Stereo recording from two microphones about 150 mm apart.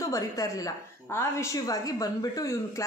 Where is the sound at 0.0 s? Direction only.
20° left (ahead or behind).